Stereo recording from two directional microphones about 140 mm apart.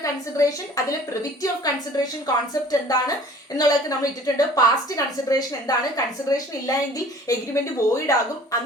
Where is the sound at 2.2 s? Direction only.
25° left (ahead or behind).